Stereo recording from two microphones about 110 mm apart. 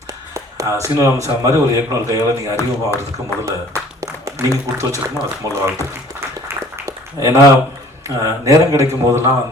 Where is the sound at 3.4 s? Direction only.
30° right (ahead or behind).